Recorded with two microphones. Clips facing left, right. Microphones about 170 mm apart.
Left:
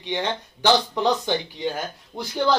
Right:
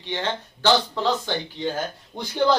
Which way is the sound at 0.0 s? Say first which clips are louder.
Left 1 dB; 15° left (ahead or behind).